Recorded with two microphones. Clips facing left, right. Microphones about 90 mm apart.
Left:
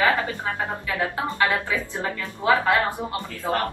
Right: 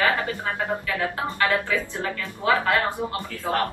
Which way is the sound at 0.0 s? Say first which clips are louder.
Left 1 dB; 20° left (ahead or behind).